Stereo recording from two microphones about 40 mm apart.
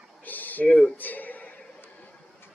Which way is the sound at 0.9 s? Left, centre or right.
Left.